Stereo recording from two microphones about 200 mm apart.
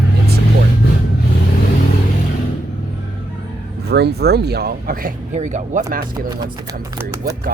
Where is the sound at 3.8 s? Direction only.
55° right (ahead or behind).